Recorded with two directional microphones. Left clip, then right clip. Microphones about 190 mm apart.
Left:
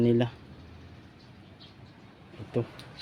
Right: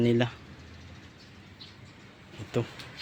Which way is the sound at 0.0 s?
15° left (ahead or behind).